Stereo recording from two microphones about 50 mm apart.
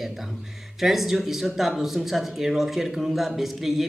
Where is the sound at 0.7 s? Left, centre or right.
Centre.